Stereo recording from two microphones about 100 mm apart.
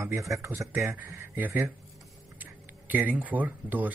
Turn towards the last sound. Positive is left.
turn(degrees=-15)  # may be behind; listen again after turning